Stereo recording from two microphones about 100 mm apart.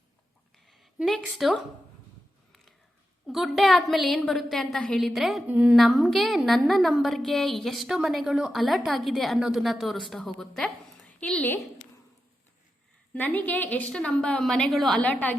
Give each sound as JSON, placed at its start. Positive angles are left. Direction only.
{"t": 0.7, "sound": "a woman's voice", "side_deg": 0}
{"t": 3.2, "sound": "a woman's voice", "side_deg": 0}
{"t": 5.5, "sound": "a woman's voice", "side_deg": -10}
{"t": 5.7, "sound": "a woman's voice", "side_deg": 0}
{"t": 13.1, "sound": "a woman's voice", "side_deg": 15}
{"t": 15.0, "sound": "a woman's voice", "side_deg": 15}